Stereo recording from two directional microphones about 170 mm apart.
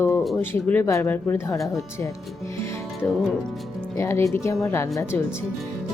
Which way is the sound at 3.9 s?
15° left (ahead or behind).